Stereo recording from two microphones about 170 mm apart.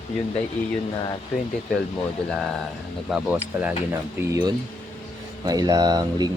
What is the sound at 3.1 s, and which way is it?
Speech, 10° right (ahead or behind).